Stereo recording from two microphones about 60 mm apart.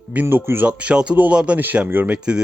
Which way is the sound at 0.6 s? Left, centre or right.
Centre.